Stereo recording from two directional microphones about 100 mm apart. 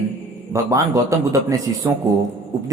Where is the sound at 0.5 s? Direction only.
45° right (ahead or behind).